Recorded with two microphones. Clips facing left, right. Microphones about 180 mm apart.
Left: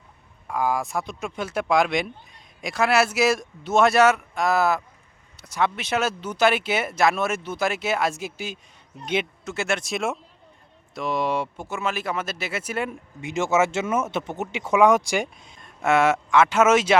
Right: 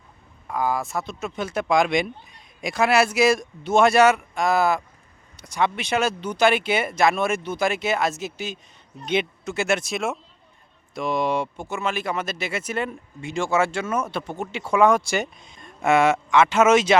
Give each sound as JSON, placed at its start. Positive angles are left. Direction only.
{"t": 0.4, "sound": "speech", "side_deg": 10}
{"t": 13.2, "sound": "speech", "side_deg": 20}